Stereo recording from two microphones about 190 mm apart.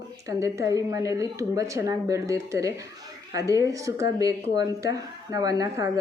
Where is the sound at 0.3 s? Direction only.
15° right (ahead or behind).